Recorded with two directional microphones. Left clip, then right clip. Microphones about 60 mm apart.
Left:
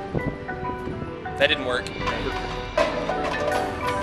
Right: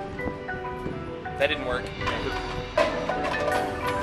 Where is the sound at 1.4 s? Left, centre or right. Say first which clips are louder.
Left 4 dB; left.